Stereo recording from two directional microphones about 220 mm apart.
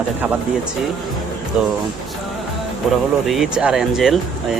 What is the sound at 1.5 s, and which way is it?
Speech, 5° right (ahead or behind).